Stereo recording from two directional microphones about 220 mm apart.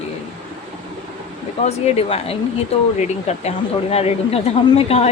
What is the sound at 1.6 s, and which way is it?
A woman's voice, 25° left (ahead or behind).